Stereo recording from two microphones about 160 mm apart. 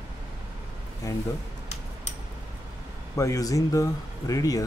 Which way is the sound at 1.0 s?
20° left (ahead or behind).